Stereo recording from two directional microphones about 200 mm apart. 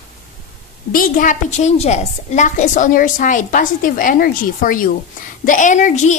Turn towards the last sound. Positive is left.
turn(degrees=35)  # may be behind; listen again after turning